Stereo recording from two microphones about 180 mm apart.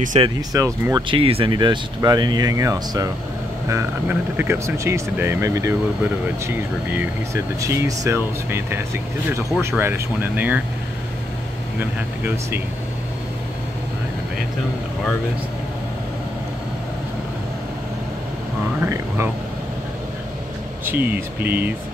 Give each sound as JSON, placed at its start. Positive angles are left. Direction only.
{"t": 0.2, "sound": "speech", "side_deg": -20}
{"t": 1.0, "sound": "speech", "side_deg": -30}
{"t": 12.2, "sound": "speech", "side_deg": -10}
{"t": 18.8, "sound": "speech", "side_deg": -15}
{"t": 20.8, "sound": "speech", "side_deg": -10}